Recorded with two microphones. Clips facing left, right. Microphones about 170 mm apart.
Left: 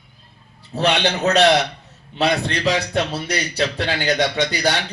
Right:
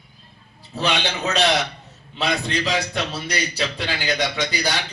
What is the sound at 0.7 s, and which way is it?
A man's voice, 65° left (ahead or behind).